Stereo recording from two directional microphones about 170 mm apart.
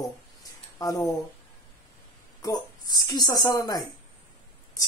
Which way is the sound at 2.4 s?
20° left (ahead or behind).